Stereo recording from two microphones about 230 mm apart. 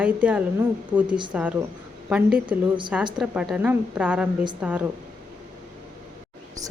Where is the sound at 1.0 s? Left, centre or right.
Centre.